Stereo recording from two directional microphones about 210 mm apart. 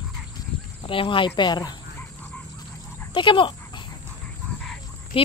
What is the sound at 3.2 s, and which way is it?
Speech, 25° left (ahead or behind).